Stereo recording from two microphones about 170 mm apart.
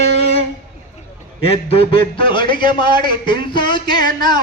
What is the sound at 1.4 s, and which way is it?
A man's voice, 35° left (ahead or behind).